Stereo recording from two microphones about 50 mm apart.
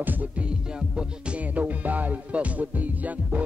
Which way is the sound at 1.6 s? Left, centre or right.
Right.